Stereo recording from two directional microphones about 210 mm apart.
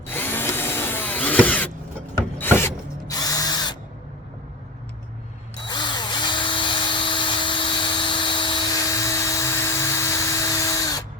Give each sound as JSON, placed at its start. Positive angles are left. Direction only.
{"t": 0.1, "sound": "drill", "side_deg": 10}
{"t": 2.1, "sound": "ratchet", "side_deg": 10}
{"t": 5.6, "sound": "drill", "side_deg": 20}